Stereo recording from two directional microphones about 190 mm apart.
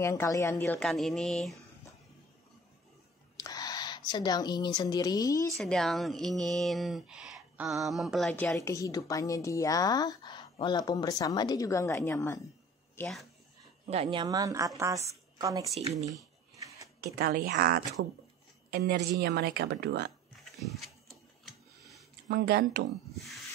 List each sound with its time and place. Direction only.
0.0 s speech: 15° left (ahead or behind)
3.4 s a woman's voice: 20° left (ahead or behind)
5.5 s speech: centre (ahead or behind)
8.5 s speech: 15° left (ahead or behind)
12.9 s speech: centre (ahead or behind)
13.8 s a woman's voice: 35° right (ahead or behind)
14.2 s a woman's voice: 20° right (ahead or behind)
17.0 s speech: 50° right (ahead or behind)
18.0 s speech: 70° right (ahead or behind)
18.7 s speech: 60° right (ahead or behind)
20.3 s sewing machine: centre (ahead or behind)
22.3 s speech: 60° right (ahead or behind)